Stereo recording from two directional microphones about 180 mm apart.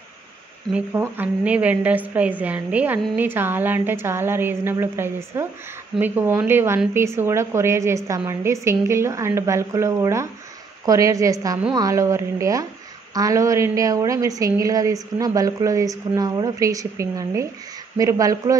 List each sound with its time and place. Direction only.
0.7 s a woman's voice: 10° right (ahead or behind)